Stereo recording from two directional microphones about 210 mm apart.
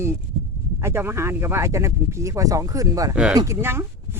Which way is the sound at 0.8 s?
10° right (ahead or behind).